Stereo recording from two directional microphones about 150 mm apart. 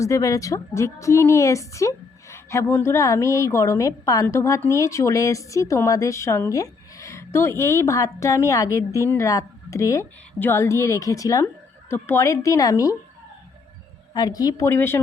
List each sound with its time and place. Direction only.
0.0 s a woman's voice: 20° left (ahead or behind)
14.1 s a woman's voice: 25° left (ahead or behind)